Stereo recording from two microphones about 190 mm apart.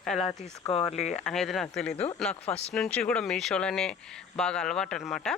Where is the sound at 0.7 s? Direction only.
30° left (ahead or behind).